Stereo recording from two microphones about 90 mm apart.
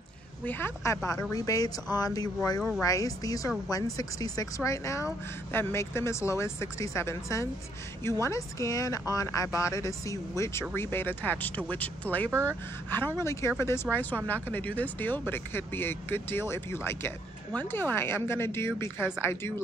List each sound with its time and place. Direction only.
0.5 s speech: 25° left (ahead or behind)
1.3 s a woman's voice: 40° left (ahead or behind); by 12.3 s 20° left (ahead or behind)
12.3 s speech: 30° right (ahead or behind)
13.2 s speech: 30° left (ahead or behind)
18.9 s speech: 10° right (ahead or behind)